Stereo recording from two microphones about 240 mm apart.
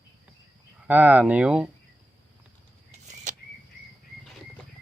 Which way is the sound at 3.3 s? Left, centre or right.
Right.